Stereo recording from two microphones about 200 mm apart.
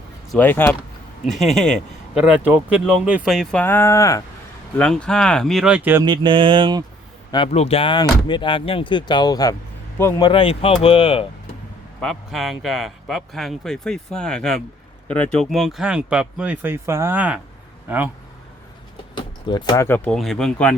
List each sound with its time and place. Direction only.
0.3 s speech: 10° left (ahead or behind)
4.8 s speech: 5° left (ahead or behind)
6.1 s speech: 25° right (ahead or behind)
7.3 s speech: 25° left (ahead or behind)
11.9 s speech: centre (ahead or behind)
19.1 s speech: 20° left (ahead or behind); by 20.7 s 5° left (ahead or behind)